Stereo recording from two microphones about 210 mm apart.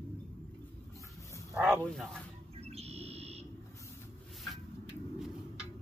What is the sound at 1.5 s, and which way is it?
Speech, 5° right (ahead or behind).